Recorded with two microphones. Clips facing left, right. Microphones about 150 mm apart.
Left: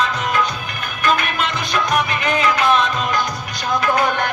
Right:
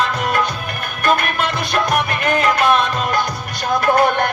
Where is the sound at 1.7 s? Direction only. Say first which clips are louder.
Even; 55° right (ahead or behind).